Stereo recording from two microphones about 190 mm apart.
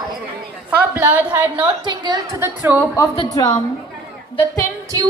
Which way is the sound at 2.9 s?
20° left (ahead or behind).